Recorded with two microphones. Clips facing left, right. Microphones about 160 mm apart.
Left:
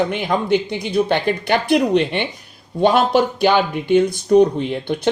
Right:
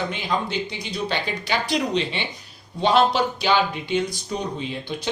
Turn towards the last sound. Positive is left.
turn(degrees=60)  # may be behind; listen again after turning